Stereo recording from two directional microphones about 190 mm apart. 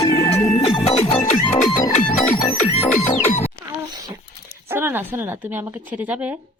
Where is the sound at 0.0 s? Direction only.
35° left (ahead or behind).